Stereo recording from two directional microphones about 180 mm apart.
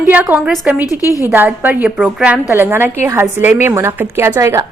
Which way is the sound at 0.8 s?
20° left (ahead or behind).